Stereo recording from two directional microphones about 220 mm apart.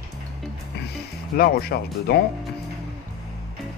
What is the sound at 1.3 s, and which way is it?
Speech, 45° left (ahead or behind).